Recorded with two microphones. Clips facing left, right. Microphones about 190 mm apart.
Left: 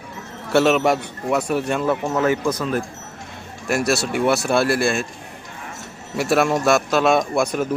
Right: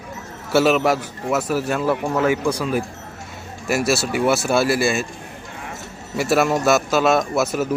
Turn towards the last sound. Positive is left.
turn(degrees=-5)  # may be behind; listen again after turning